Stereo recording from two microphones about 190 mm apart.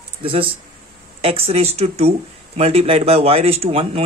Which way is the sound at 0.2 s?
30° right (ahead or behind).